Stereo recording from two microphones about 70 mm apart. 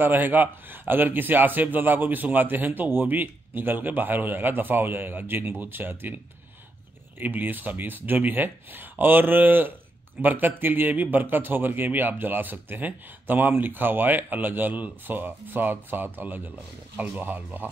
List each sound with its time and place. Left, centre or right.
0.0 s a man's voice: right